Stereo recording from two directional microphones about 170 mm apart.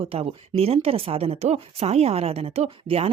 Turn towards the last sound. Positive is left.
turn(degrees=-35)  # may be behind; listen again after turning